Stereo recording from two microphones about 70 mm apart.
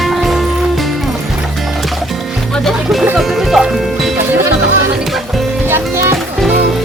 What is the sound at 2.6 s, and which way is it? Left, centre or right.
Speech, centre.